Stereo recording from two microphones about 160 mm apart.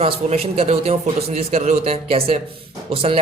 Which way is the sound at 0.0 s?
40° right (ahead or behind).